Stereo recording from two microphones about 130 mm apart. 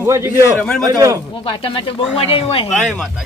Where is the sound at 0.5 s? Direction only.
10° left (ahead or behind).